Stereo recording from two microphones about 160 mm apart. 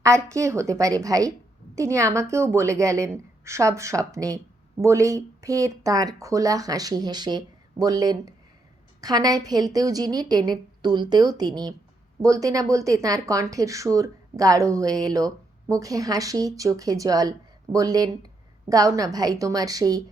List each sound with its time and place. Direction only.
0.0 s speech: 20° right (ahead or behind)